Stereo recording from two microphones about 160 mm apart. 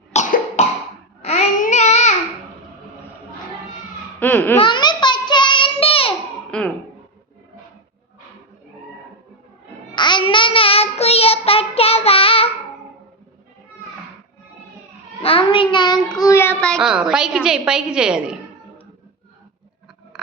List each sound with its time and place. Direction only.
0.1 s cough: 45° left (ahead or behind)
1.2 s babbling: 45° left (ahead or behind)
4.2 s laughter: 10° left (ahead or behind)
4.6 s child singing: 25° left (ahead or behind)
6.5 s speech: 5° left (ahead or behind)
9.9 s child singing: 30° left (ahead or behind)
15.2 s child singing: 35° left (ahead or behind); by 18.3 s 5° right (ahead or behind)